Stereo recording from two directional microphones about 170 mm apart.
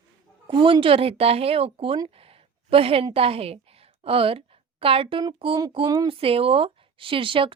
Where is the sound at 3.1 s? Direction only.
35° right (ahead or behind).